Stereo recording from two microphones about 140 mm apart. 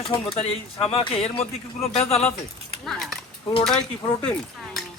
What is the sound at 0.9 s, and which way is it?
Speech, 45° left (ahead or behind).